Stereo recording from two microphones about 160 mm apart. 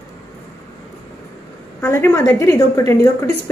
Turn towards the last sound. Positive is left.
turn(degrees=20)  # may be behind; listen again after turning